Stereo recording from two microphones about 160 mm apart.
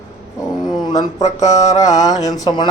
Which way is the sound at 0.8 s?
25° left (ahead or behind).